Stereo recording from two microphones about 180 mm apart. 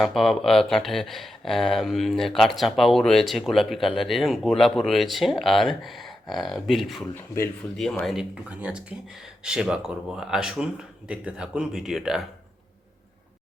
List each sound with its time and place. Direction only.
0.0 s speech: centre (ahead or behind)